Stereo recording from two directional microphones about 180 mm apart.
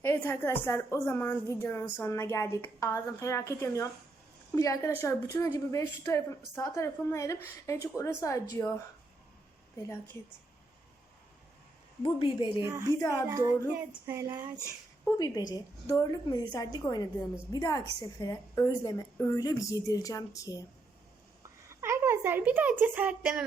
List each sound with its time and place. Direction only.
0.0 s a woman's voice: 10° left (ahead or behind)
12.0 s a woman's voice: 30° left (ahead or behind)
12.6 s a woman's voice: 20° right (ahead or behind)
15.0 s a woman's voice: 20° left (ahead or behind)
21.7 s a woman's voice: 15° right (ahead or behind)